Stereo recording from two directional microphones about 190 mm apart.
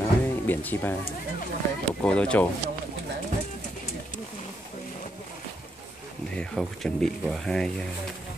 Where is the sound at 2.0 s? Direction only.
5° left (ahead or behind).